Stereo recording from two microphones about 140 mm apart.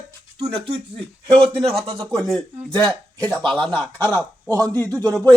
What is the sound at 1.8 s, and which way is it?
Speech, 40° right (ahead or behind).